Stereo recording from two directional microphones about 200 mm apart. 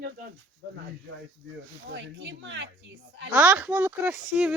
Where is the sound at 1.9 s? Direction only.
65° right (ahead or behind).